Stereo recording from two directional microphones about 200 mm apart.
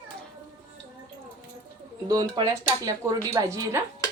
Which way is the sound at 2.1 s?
20° right (ahead or behind).